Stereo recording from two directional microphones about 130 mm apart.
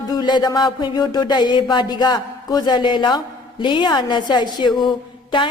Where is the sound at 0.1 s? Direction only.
30° left (ahead or behind).